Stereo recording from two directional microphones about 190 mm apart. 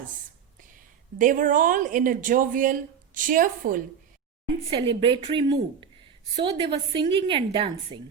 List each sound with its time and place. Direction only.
0.6 s a woman's voice: 45° right (ahead or behind)
4.7 s a woman's voice: 25° right (ahead or behind)